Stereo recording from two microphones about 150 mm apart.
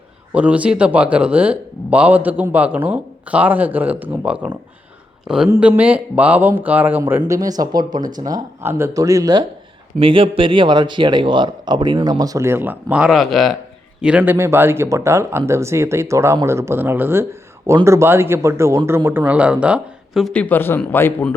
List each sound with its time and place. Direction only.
0.3 s speech: 10° right (ahead or behind)
5.5 s speech: 10° right (ahead or behind)
7.2 s a man's voice: 25° right (ahead or behind)
10.0 s a man's voice: 35° right (ahead or behind); by 21.3 s 10° left (ahead or behind)